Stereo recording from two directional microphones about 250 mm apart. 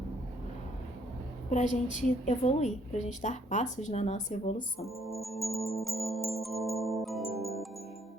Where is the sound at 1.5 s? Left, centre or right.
Left.